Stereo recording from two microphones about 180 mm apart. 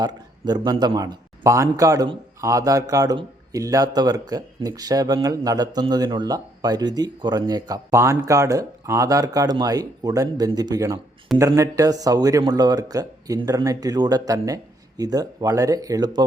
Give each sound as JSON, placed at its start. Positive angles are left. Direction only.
{"t": 0.0, "sound": "a man's voice", "side_deg": -20}